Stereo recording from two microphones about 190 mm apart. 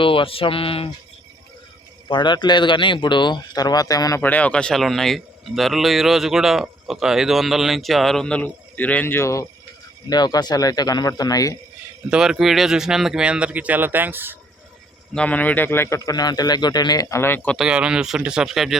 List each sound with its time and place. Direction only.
0.0 s speech: 30° left (ahead or behind)
2.0 s speech: 25° left (ahead or behind)
12.1 s speech: 5° right (ahead or behind)
15.1 s a man's voice: 5° left (ahead or behind)
17.6 s speech: 5° right (ahead or behind)